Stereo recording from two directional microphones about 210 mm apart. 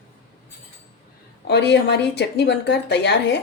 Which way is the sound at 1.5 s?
55° left (ahead or behind).